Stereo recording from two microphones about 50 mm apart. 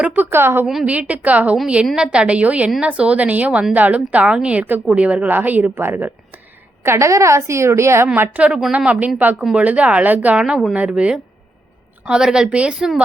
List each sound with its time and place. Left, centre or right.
0.2 s a woman's voice: right
0.9 s a woman's voice: right
1.6 s a woman's voice: centre; by 5.7 s right
5.7 s speech: right
6.8 s a woman's voice: right
8.0 s a woman's voice: right
10.3 s a woman's voice: centre